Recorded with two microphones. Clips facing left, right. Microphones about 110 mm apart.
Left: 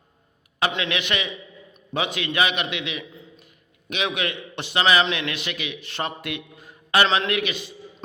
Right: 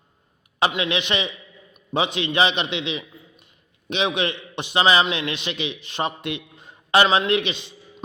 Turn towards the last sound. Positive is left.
turn(degrees=-20)  # may be behind; listen again after turning